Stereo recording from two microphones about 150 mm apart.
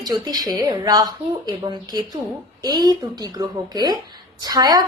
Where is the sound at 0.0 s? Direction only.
25° right (ahead or behind).